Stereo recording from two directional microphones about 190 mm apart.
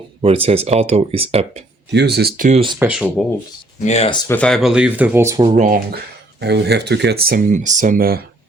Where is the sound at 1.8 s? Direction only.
65° right (ahead or behind); by 2.6 s 45° right (ahead or behind).